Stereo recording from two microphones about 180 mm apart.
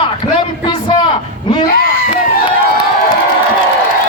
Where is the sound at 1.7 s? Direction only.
55° left (ahead or behind).